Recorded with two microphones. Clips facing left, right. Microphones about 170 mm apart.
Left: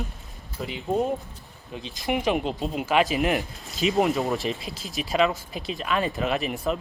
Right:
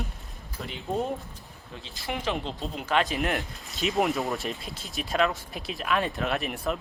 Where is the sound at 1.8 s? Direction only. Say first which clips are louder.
Left 6 dB; 20° left (ahead or behind).